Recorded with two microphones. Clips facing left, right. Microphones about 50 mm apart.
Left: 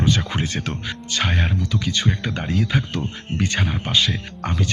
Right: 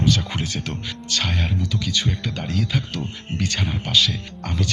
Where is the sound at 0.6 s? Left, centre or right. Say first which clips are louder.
Left 2 dB; centre.